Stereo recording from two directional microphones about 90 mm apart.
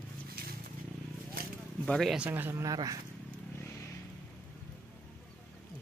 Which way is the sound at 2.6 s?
45° right (ahead or behind).